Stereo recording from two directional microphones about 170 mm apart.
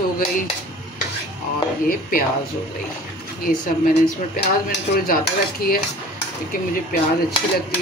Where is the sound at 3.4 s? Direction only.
55° left (ahead or behind).